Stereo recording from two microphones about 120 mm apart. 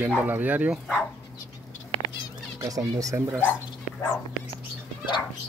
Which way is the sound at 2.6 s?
30° right (ahead or behind).